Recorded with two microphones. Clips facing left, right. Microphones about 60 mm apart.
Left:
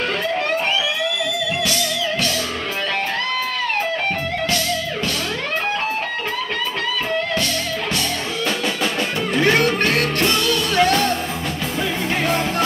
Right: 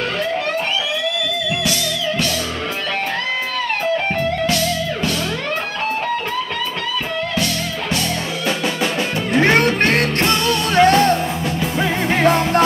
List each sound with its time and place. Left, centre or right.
9.4 s music: right